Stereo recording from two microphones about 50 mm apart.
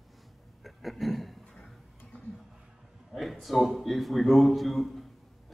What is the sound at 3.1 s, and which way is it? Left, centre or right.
A man's voice, centre.